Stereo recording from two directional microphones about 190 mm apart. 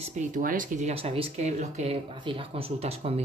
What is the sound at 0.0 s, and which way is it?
Speech, 40° right (ahead or behind).